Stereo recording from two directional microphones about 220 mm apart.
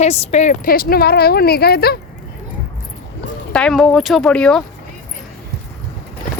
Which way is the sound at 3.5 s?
5° left (ahead or behind).